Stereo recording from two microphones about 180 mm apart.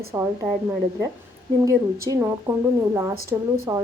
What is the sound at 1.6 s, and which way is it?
A woman's voice, 15° right (ahead or behind).